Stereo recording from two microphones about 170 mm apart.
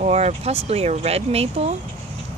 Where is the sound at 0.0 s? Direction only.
40° right (ahead or behind).